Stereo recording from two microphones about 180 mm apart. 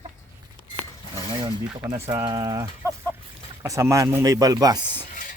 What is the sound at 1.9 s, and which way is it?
Speech, 20° right (ahead or behind).